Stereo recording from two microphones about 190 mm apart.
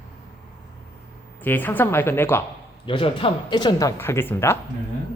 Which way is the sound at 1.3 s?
10° left (ahead or behind).